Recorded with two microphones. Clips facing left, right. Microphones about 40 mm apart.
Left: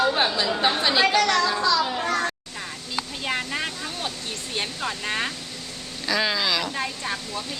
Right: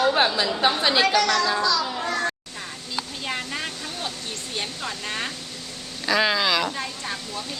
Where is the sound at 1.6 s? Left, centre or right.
Centre.